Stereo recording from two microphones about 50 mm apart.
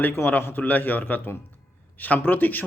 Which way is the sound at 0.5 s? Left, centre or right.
Left.